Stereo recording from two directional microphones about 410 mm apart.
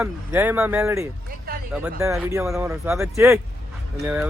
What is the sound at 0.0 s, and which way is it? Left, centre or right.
Speech, centre.